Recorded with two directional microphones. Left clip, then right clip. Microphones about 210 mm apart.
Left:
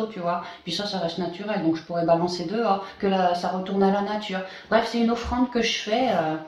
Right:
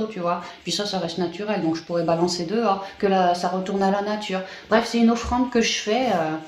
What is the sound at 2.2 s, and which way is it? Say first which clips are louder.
Speech: right 2 dB; 45° right (ahead or behind).